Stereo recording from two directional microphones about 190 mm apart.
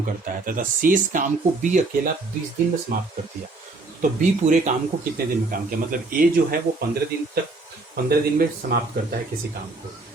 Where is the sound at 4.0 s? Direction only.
40° right (ahead or behind).